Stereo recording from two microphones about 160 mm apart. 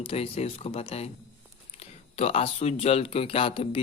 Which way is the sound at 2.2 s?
40° left (ahead or behind).